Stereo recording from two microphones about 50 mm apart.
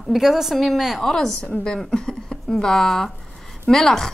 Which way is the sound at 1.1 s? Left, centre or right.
Centre.